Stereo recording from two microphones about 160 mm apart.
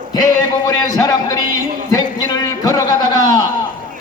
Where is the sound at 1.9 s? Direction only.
25° left (ahead or behind).